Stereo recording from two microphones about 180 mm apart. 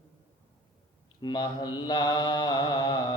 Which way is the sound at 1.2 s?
25° left (ahead or behind).